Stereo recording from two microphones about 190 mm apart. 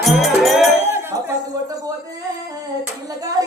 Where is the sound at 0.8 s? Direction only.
15° right (ahead or behind).